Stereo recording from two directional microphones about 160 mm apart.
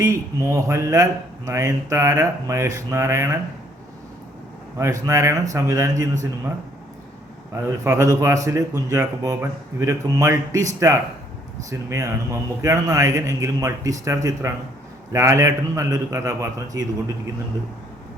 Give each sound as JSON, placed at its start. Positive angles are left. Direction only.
{"t": 0.0, "sound": "speech", "side_deg": -20}
{"t": 4.8, "sound": "speech", "side_deg": -20}
{"t": 7.5, "sound": "speech", "side_deg": -20}